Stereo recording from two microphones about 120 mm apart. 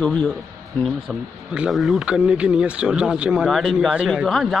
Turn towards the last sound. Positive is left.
turn(degrees=0)  # may be behind; listen again after turning